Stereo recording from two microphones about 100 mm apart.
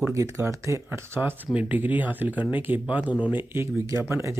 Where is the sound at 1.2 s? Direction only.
15° right (ahead or behind).